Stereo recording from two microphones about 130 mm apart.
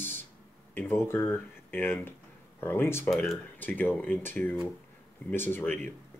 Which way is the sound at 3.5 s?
15° left (ahead or behind).